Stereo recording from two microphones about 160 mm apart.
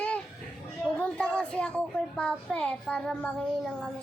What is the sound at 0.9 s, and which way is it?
A woman's voice, 10° left (ahead or behind).